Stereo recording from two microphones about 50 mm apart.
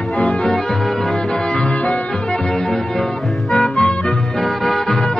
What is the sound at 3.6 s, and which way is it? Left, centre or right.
Music, left.